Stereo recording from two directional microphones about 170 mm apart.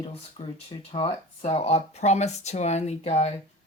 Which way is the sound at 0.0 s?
35° left (ahead or behind).